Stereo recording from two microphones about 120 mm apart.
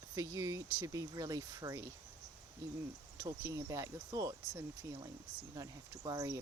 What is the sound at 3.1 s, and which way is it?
Speech, 25° right (ahead or behind).